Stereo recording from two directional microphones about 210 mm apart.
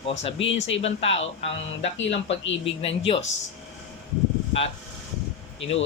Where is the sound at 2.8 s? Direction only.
25° left (ahead or behind).